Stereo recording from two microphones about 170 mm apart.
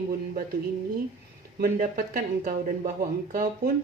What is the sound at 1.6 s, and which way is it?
Speech, 50° right (ahead or behind).